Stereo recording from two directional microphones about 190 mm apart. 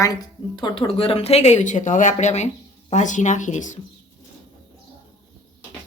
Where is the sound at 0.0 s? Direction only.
20° left (ahead or behind); by 3.8 s 40° left (ahead or behind).